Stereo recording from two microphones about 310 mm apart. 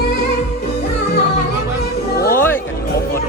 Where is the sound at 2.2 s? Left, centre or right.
Left.